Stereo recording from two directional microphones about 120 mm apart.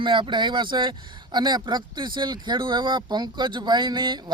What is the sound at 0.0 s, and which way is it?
Speech, 40° right (ahead or behind).